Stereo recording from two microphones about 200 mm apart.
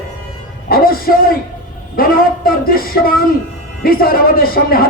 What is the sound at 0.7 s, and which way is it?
Music, 45° left (ahead or behind).